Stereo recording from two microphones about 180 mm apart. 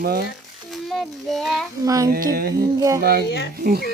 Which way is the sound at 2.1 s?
55° right (ahead or behind).